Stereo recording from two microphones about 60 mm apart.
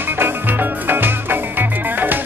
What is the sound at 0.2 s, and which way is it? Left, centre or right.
Music, right.